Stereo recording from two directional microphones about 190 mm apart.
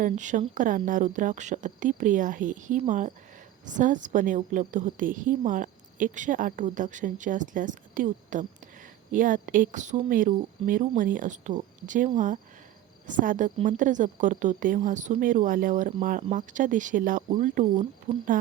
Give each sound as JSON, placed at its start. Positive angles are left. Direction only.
{"t": 0.0, "sound": "a woman's voice", "side_deg": -40}